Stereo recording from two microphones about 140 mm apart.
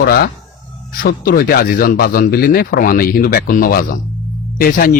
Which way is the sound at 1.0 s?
90° left.